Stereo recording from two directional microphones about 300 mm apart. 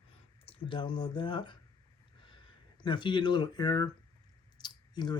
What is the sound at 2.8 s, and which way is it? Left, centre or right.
Speech, centre.